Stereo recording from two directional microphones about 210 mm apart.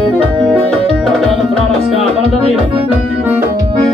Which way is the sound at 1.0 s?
Centre (ahead or behind).